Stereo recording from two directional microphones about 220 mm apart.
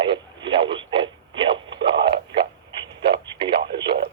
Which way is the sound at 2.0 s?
20° right (ahead or behind).